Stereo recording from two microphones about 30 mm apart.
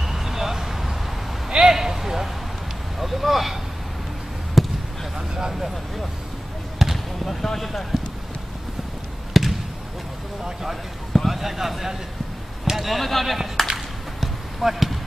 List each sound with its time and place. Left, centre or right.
0.0 s vehicle: centre
1.6 s a sound: centre
4.6 s basketball bounce: centre
5.1 s vehicle: right
6.8 s basketball bounce: centre
7.2 s speech: centre
9.3 s basketball bounce: centre
11.1 s speech: centre
14.2 s basketball bounce: centre